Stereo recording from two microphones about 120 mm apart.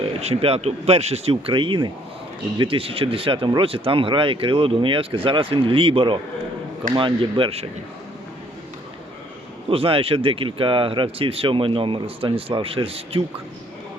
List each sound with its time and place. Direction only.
0.1 s speech: 55° right (ahead or behind)
9.6 s speech: 50° right (ahead or behind)